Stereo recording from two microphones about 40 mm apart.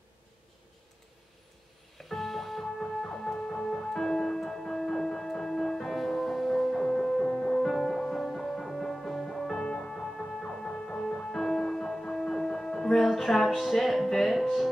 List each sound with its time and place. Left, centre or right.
2.0 s music: centre
2.8 s music: centre
6.8 s music: centre
11.4 s music: centre